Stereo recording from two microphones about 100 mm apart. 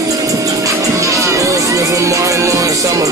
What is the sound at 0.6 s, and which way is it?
Music, 35° right (ahead or behind).